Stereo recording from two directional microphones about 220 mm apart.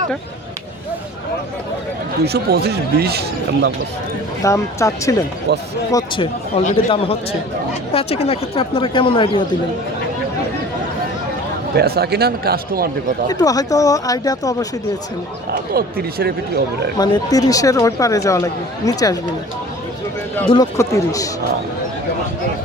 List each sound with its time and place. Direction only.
2.2 s speech: 45° right (ahead or behind)
4.4 s speech: 15° left (ahead or behind)
5.5 s speech: 50° right (ahead or behind)
5.9 s speech: 15° left (ahead or behind)
6.7 s speech: 25° left (ahead or behind)
11.8 s speech: 45° right (ahead or behind)
13.2 s speech: 15° left (ahead or behind)
15.7 s speech: 45° right (ahead or behind)
17.0 s speech: 15° left (ahead or behind)
20.5 s speech: 15° left (ahead or behind)